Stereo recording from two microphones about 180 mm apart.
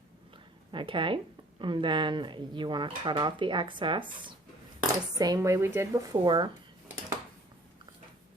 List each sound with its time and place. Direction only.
0.7 s speech: 25° right (ahead or behind)